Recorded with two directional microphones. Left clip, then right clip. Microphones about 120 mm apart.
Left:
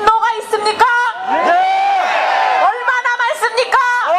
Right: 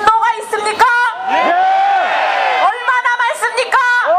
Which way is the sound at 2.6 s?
15° right (ahead or behind).